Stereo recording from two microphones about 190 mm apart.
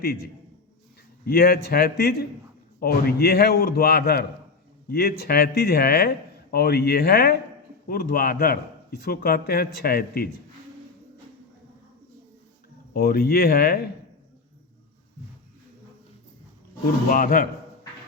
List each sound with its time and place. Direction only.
1.2 s a man's voice: 50° left (ahead or behind)
12.9 s a man's voice: 55° left (ahead or behind)
17.1 s a man's voice: 45° left (ahead or behind)